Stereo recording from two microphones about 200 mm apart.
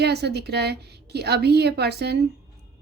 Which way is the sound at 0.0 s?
55° right (ahead or behind).